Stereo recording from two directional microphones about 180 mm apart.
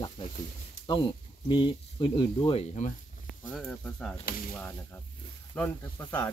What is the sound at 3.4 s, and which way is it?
Speech, centre (ahead or behind).